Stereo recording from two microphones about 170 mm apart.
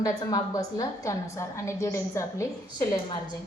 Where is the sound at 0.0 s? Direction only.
20° left (ahead or behind).